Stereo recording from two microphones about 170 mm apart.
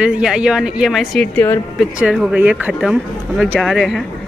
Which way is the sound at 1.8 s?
5° right (ahead or behind).